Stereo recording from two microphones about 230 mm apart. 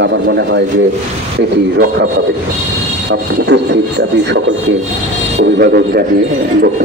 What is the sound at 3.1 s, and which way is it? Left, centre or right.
A man's voice, right.